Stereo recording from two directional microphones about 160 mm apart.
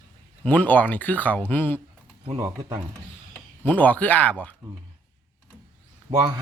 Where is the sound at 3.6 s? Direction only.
10° left (ahead or behind).